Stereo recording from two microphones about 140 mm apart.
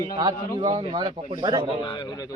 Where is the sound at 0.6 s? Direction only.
45° right (ahead or behind).